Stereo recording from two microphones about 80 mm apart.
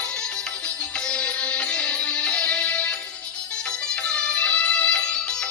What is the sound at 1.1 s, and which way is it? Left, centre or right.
Music, centre.